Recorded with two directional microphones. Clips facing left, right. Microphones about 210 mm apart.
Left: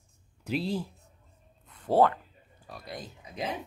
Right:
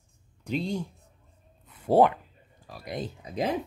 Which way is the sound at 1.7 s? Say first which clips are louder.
Right 3 dB; 10° right (ahead or behind).